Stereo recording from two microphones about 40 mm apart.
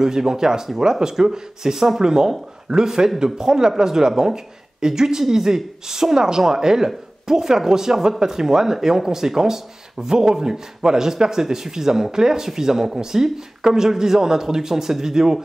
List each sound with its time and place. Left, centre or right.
0.0 s speech: centre